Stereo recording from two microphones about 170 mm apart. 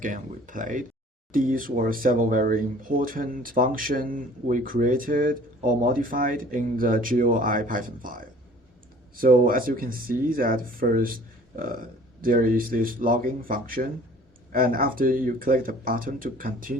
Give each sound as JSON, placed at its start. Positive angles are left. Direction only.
{"t": 0.0, "sound": "speech", "side_deg": -50}